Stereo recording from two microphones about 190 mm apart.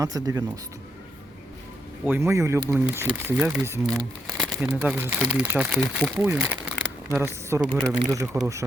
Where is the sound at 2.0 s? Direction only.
10° right (ahead or behind).